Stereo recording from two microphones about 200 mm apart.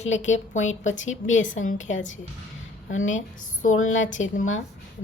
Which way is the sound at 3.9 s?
75° left (ahead or behind).